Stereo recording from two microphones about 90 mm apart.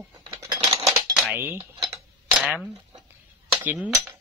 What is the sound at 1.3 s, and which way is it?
Cutlery, 25° right (ahead or behind).